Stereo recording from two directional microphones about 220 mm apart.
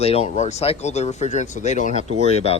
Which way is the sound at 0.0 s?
25° left (ahead or behind).